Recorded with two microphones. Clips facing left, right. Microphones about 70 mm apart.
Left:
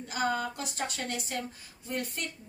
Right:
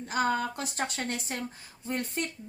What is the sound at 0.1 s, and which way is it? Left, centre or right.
A woman's voice, right.